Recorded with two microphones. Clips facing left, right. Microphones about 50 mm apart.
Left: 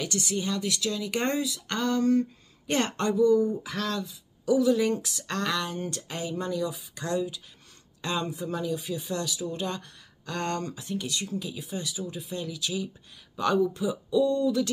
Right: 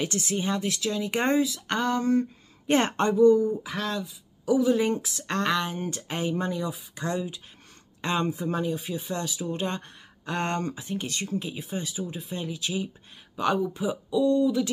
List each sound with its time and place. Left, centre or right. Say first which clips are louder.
0.0 s a woman's voice: right 2 dB; right
4.6 s speech: even; right
14.1 s speech: right 1 dB; centre